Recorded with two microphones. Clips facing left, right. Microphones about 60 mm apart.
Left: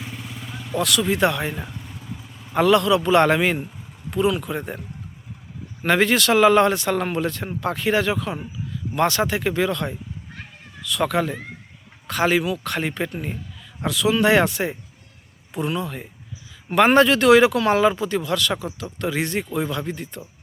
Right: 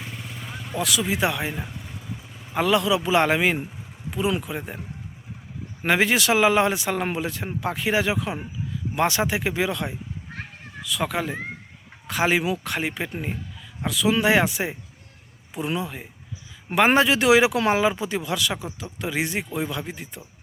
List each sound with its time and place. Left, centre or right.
0.0 s vehicle: centre
4.4 s speech: centre
5.8 s speech: centre
13.8 s speech: centre